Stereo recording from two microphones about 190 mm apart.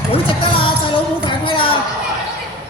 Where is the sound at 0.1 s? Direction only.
25° left (ahead or behind).